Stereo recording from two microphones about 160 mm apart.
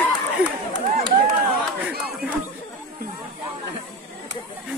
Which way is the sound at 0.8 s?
60° right (ahead or behind).